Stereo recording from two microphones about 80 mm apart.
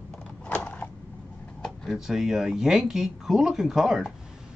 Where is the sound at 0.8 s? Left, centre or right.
Centre.